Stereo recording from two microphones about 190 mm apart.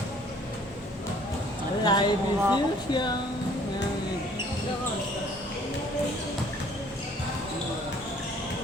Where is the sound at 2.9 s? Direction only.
25° left (ahead or behind).